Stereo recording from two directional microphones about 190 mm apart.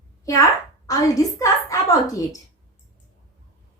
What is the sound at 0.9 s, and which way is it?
A woman's voice, 15° left (ahead or behind).